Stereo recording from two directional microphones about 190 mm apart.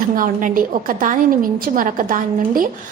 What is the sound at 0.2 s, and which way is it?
A woman's voice, 45° right (ahead or behind).